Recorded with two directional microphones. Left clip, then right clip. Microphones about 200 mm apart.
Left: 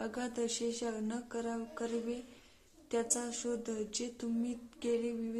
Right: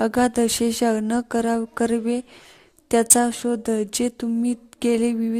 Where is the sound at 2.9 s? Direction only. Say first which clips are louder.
Right 17 dB; 45° right (ahead or behind).